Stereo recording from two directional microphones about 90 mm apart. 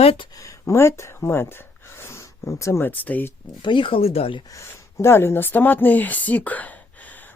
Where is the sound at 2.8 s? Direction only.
20° left (ahead or behind).